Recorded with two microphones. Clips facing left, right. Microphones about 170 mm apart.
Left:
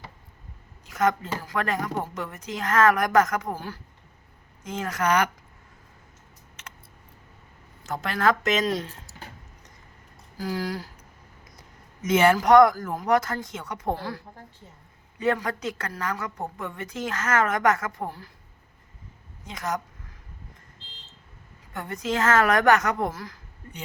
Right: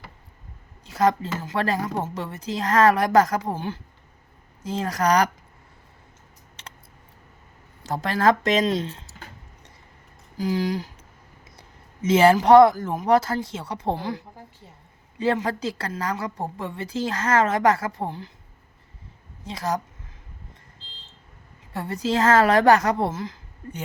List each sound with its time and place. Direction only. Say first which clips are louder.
0.9 s a woman's voice: right 3 dB; 30° right (ahead or behind)
6.6 s a sound: right 2 dB; 35° right (ahead or behind)
7.9 s a woman's voice: right 4 dB; 35° right (ahead or behind)
10.3 s speech: right 5 dB; 20° right (ahead or behind)
12.0 s speech: right 3 dB; 30° right (ahead or behind)
13.9 s a woman's voice: right 3 dB; 20° right (ahead or behind)
19.5 s a woman's voice: right 3 dB; 30° right (ahead or behind)
21.7 s a woman's voice: right 4 dB; 30° right (ahead or behind)